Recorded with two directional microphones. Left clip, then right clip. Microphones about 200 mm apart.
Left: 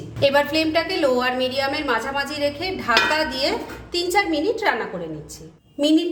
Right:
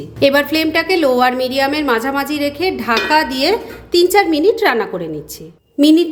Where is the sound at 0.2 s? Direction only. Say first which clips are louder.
Right 5 dB; 40° right (ahead or behind).